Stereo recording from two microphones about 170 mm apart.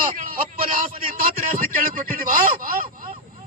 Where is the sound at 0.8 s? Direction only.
55° right (ahead or behind).